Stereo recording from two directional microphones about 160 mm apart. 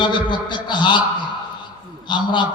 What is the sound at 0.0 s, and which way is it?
A man's voice, 30° left (ahead or behind).